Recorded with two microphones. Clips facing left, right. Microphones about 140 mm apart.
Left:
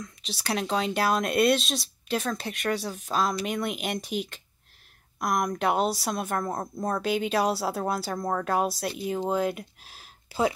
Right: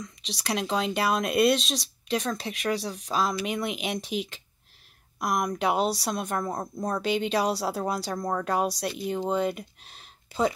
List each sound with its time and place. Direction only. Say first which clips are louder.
0.0 s speech: even; centre (ahead or behind)